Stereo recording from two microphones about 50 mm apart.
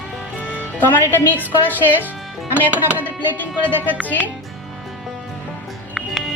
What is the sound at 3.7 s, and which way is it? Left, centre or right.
Speech, right.